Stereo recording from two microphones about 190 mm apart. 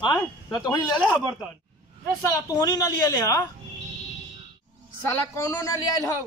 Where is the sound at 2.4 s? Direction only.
15° left (ahead or behind).